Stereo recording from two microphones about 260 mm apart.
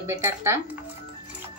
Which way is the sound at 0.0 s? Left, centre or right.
Centre.